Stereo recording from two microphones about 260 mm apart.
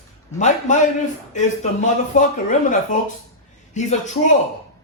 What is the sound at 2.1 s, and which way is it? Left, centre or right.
Speech, left.